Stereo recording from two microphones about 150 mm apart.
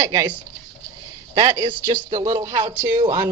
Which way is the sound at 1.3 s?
25° right (ahead or behind).